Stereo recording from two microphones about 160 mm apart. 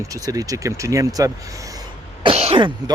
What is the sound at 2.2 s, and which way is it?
Speech, 35° right (ahead or behind).